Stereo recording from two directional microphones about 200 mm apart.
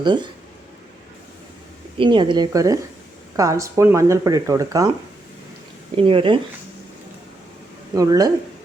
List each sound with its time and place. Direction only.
0.0 s speech: 25° right (ahead or behind)
2.0 s speech: 25° right (ahead or behind)
6.0 s speech: 25° right (ahead or behind)
7.9 s speech: 15° right (ahead or behind)